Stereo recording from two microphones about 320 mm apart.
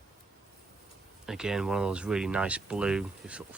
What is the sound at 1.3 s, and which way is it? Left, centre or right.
Speech, centre.